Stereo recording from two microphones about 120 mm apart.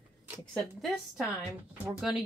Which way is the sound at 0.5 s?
Centre (ahead or behind).